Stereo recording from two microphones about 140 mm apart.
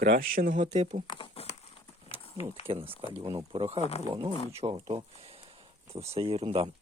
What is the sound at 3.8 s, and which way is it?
Speech, 55° left (ahead or behind).